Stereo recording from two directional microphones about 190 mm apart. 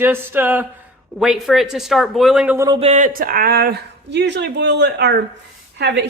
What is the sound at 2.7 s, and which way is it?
Speech, 35° right (ahead or behind).